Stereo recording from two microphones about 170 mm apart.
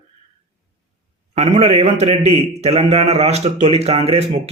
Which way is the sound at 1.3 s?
40° right (ahead or behind).